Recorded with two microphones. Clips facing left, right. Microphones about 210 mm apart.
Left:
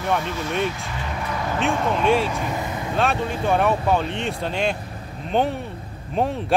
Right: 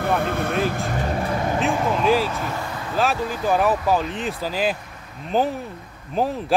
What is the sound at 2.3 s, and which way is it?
Vehicle, 15° left (ahead or behind).